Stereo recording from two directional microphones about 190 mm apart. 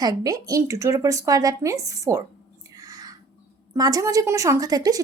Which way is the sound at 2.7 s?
20° right (ahead or behind).